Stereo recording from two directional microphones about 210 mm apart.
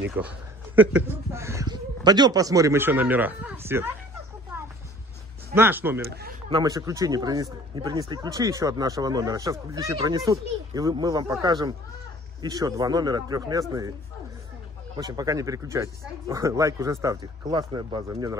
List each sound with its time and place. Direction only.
0.7 s speech: 10° right (ahead or behind)
5.5 s speech: 10° right (ahead or behind)
15.0 s speech: 15° right (ahead or behind)